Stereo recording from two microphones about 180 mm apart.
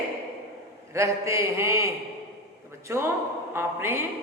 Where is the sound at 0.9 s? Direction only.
15° right (ahead or behind).